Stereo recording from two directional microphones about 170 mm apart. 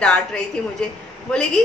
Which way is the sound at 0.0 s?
5° left (ahead or behind).